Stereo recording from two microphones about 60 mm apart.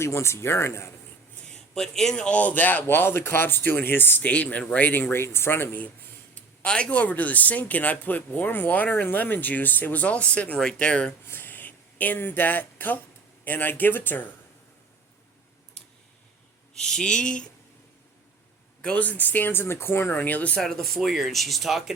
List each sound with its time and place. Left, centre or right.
0.0 s speech: left
1.5 s a man's voice: centre; by 2.8 s left
2.8 s speech: left
4.3 s speech: left
6.7 s speech: centre
11.3 s speech: left
16.7 s speech: centre
18.8 s speech: centre
20.6 s speech: centre